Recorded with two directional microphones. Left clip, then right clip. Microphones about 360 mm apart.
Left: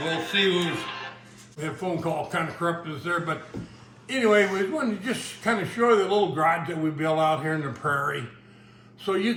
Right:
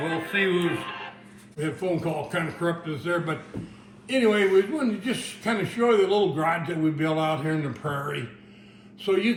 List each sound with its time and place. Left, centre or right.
0.3 s a man's voice: centre